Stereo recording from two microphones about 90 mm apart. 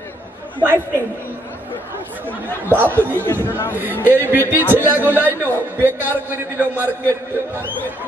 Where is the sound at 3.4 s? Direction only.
25° left (ahead or behind).